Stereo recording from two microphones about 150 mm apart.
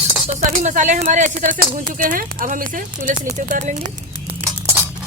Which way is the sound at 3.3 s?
55° right (ahead or behind).